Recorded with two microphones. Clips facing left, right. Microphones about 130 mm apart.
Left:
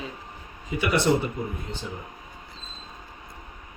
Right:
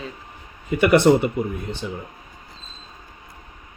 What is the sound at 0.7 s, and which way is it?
Speech, 60° right (ahead or behind).